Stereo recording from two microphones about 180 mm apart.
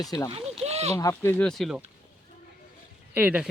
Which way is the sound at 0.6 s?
35° right (ahead or behind).